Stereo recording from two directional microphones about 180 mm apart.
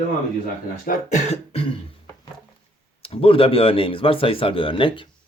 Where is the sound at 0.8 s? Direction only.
40° left (ahead or behind).